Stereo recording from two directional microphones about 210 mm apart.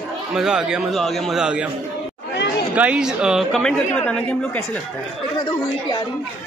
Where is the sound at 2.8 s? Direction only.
5° right (ahead or behind).